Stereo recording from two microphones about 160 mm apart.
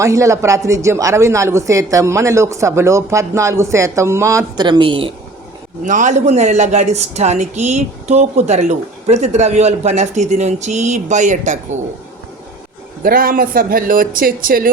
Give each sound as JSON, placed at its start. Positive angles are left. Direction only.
{"t": 0.0, "sound": "speech", "side_deg": -20}
{"t": 5.8, "sound": "a man's voice", "side_deg": -50}
{"t": 13.0, "sound": "speech", "side_deg": -65}